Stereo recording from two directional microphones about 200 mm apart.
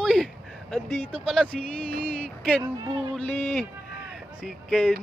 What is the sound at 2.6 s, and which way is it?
Speech, 20° right (ahead or behind).